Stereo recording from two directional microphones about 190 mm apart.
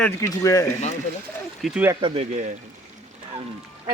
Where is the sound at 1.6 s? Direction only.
10° right (ahead or behind).